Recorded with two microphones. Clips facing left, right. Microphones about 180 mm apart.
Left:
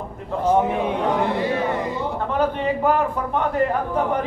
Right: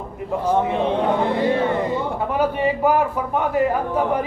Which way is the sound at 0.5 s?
10° left (ahead or behind).